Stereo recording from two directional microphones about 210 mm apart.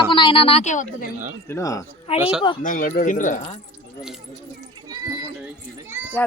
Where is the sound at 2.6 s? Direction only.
40° left (ahead or behind).